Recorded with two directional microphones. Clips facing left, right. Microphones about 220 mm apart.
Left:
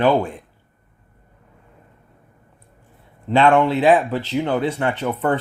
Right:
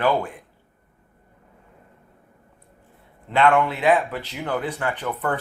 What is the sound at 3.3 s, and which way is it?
A man's voice, 30° left (ahead or behind).